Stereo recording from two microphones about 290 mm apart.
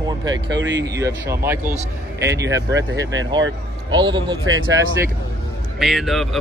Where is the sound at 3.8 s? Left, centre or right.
Centre.